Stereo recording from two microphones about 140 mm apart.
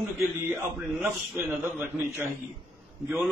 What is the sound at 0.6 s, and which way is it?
A man's voice, 15° right (ahead or behind).